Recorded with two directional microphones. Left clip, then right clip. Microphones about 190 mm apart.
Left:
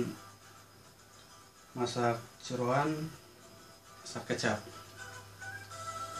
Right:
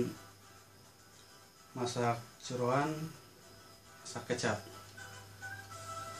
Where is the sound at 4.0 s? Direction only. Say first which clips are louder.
Left 1 dB; 5° right (ahead or behind).